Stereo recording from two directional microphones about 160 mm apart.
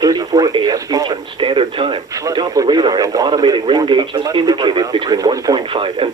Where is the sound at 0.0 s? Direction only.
20° right (ahead or behind).